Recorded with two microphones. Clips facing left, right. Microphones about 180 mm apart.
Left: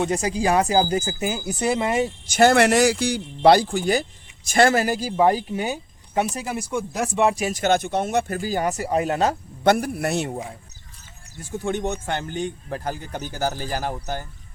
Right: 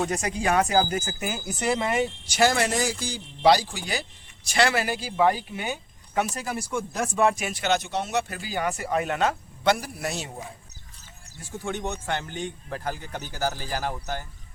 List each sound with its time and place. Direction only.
0.0 s speech: 30° left (ahead or behind)
2.0 s speech: 50° left (ahead or behind)
6.2 s speech: 15° left (ahead or behind)
7.3 s speech: 40° left (ahead or behind)
9.6 s speech: 55° left (ahead or behind)
11.6 s speech: 20° left (ahead or behind)
12.0 s speech: 45° left (ahead or behind)